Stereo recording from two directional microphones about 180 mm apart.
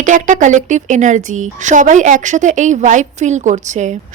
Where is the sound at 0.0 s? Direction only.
45° right (ahead or behind).